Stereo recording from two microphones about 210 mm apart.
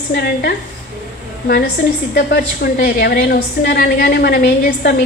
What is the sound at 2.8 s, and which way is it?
A woman's voice, 45° left (ahead or behind).